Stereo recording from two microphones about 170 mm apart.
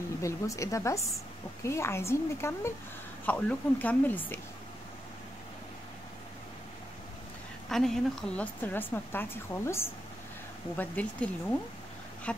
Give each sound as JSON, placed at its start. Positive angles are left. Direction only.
{"t": 0.2, "sound": "a woman's voice", "side_deg": 20}
{"t": 7.7, "sound": "a woman's voice", "side_deg": 0}